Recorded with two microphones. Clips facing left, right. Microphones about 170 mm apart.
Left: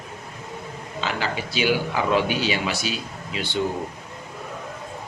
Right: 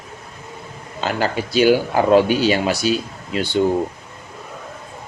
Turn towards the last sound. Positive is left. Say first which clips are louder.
# right 7 dB
turn(degrees=-40)  # may be behind; listen again after turning